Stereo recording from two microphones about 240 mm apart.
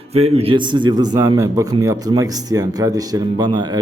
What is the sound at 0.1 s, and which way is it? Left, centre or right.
A man's voice, right.